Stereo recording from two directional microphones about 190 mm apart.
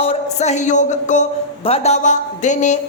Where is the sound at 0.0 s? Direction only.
35° left (ahead or behind).